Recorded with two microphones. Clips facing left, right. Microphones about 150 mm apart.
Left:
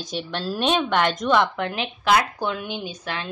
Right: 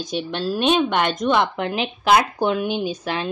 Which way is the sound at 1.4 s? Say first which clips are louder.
Right 1 dB; 15° right (ahead or behind).